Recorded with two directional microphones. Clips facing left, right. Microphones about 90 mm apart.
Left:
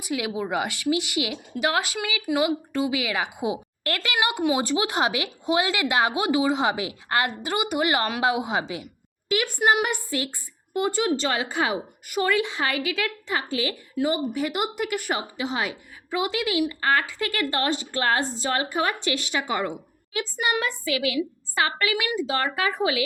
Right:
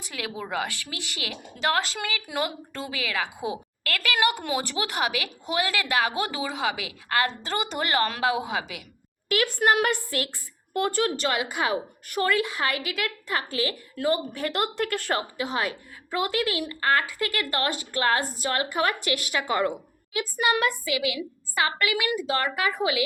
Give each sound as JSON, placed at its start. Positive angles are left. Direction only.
{"t": 0.0, "sound": "a woman's voice", "side_deg": 15}